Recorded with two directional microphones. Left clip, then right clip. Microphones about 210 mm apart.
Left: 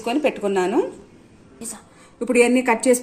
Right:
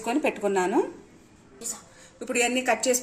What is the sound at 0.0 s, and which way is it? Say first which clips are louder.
Speech: left 5 dB; 5° right (ahead or behind).